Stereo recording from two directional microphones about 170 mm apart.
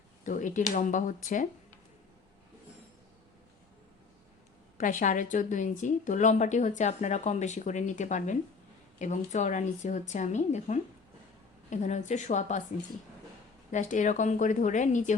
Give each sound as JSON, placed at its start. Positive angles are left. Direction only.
{"t": 0.3, "sound": "speech", "side_deg": 50}
{"t": 4.8, "sound": "speech", "side_deg": 50}
{"t": 13.7, "sound": "speech", "side_deg": 45}